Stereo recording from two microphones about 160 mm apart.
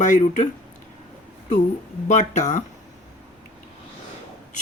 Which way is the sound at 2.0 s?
50° left (ahead or behind).